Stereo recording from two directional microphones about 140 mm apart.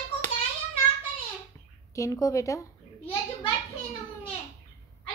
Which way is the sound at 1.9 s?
25° left (ahead or behind).